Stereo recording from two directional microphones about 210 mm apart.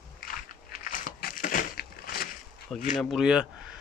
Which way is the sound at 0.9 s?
40° left (ahead or behind).